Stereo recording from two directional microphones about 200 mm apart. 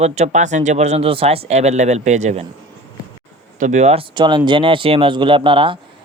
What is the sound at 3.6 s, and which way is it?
Speech, 35° right (ahead or behind).